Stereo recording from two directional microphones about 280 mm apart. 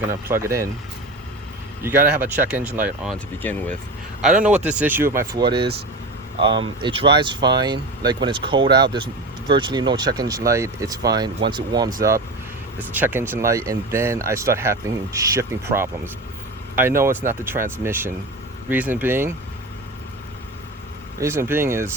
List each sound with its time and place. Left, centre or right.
0.1 s speech: centre
1.8 s speech: centre
3.4 s speech: centre
12.9 s speech: centre
21.2 s speech: centre